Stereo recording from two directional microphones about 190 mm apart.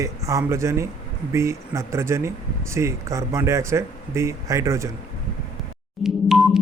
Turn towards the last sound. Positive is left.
turn(degrees=0)  # may be behind; listen again after turning